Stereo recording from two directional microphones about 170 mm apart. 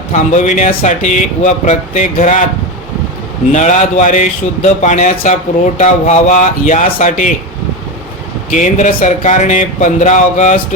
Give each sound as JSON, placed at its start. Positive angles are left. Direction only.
{"t": 0.1, "sound": "a man's voice", "side_deg": 45}
{"t": 3.5, "sound": "a man's voice", "side_deg": 45}
{"t": 8.4, "sound": "a man's voice", "side_deg": 45}